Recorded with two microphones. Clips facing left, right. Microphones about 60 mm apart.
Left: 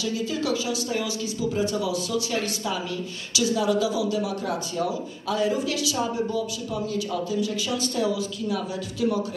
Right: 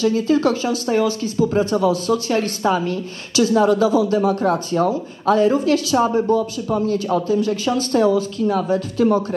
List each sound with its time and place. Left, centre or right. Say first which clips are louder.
0.0 s a man's voice: right 11 dB; right